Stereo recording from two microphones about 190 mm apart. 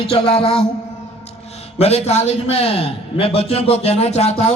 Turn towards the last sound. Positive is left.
turn(degrees=35)  # may be behind; listen again after turning